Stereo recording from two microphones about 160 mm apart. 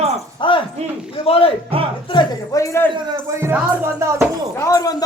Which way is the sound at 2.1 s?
25° left (ahead or behind).